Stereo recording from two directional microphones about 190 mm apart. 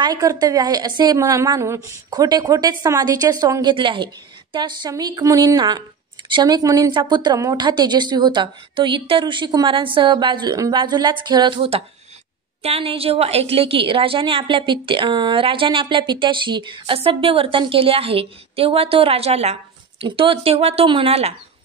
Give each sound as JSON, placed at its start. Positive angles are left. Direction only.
{"t": 0.0, "sound": "a woman's voice", "side_deg": -20}